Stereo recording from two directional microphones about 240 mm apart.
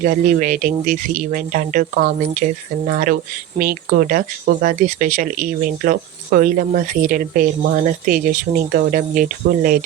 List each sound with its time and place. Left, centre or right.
0.0 s speech: right